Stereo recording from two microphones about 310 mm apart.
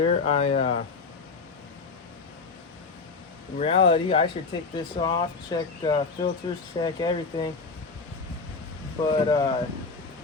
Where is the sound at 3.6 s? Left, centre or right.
Centre.